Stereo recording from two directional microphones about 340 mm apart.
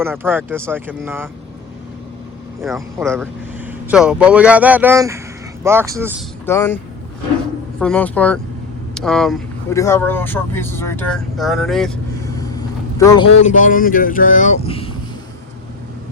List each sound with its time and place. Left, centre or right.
0.0 s speech: centre
2.6 s speech: centre
6.4 s speech: centre
7.8 s speech: centre
13.4 s speech: left